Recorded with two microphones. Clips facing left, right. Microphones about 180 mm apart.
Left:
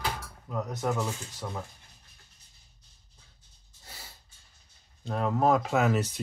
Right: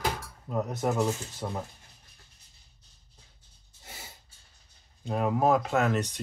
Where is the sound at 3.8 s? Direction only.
25° right (ahead or behind).